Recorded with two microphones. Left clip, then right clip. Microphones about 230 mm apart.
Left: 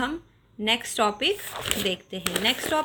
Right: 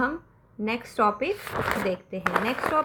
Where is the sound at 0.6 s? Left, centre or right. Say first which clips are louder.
Left 1 dB; left.